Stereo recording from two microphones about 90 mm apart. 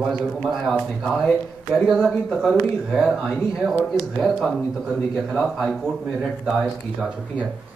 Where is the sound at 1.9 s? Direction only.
5° left (ahead or behind).